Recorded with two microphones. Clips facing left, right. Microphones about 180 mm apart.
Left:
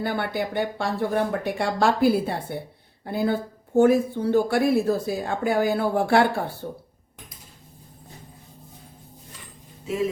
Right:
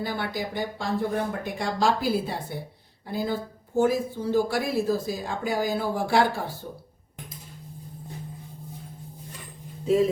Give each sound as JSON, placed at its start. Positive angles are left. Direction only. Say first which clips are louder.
{"t": 0.0, "sound": "speech", "louder": "left 4 dB", "side_deg": 60}